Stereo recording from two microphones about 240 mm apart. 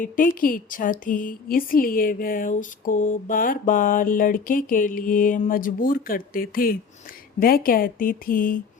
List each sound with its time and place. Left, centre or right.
0.0 s speech: left